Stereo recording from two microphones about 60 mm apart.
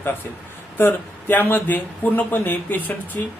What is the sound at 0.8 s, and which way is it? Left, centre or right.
Speech, left.